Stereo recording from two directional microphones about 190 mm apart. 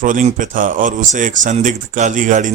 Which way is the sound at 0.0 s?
40° right (ahead or behind).